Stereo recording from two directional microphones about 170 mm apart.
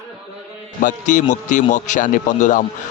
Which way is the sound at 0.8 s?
50° left (ahead or behind).